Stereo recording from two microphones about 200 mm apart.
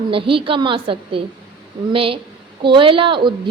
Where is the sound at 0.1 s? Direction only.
25° right (ahead or behind).